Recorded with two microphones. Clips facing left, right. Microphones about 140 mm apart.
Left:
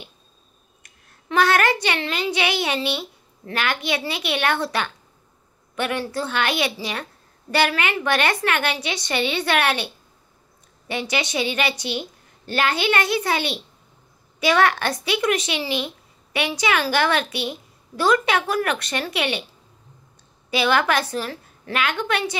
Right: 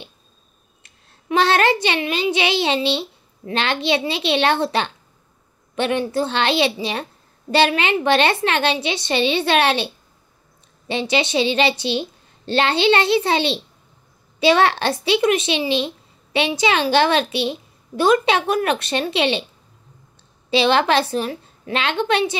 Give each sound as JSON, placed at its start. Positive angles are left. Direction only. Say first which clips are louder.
{"t": 0.8, "sound": "a woman's voice", "louder": "right 6 dB", "side_deg": -25}
{"t": 10.9, "sound": "a woman's voice", "louder": "right 5 dB", "side_deg": -25}
{"t": 20.4, "sound": "a woman's voice", "louder": "right 4 dB", "side_deg": -25}